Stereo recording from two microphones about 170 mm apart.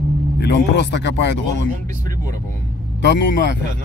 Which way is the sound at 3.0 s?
90° left.